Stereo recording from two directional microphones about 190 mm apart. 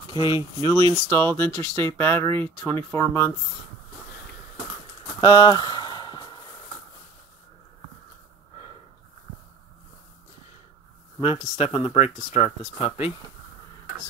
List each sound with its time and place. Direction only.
0.1 s speech: 25° left (ahead or behind)
5.2 s a sound: 25° left (ahead or behind)
11.1 s speech: 30° left (ahead or behind)